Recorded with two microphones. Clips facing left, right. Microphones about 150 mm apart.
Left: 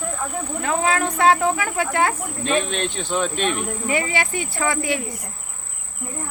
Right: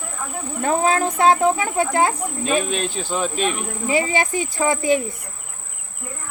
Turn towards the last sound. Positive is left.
turn(degrees=-25)  # may be behind; listen again after turning